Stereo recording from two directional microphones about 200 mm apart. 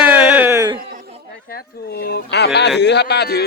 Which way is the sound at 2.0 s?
55° left (ahead or behind).